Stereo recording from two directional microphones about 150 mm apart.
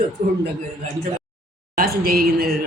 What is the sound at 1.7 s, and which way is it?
Speech, 85° right.